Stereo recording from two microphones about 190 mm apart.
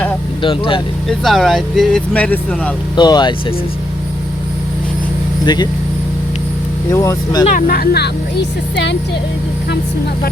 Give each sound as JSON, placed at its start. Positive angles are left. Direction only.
{"t": 0.4, "sound": "speech", "side_deg": 25}
{"t": 1.0, "sound": "speech", "side_deg": 0}
{"t": 2.9, "sound": "speech", "side_deg": 25}
{"t": 5.5, "sound": "speech", "side_deg": 25}
{"t": 6.9, "sound": "speech", "side_deg": 15}
{"t": 7.4, "sound": "speech", "side_deg": 45}